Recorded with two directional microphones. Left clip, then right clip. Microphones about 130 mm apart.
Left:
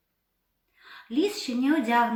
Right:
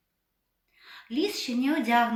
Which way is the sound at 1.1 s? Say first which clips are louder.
Left 2 dB; 15° right (ahead or behind).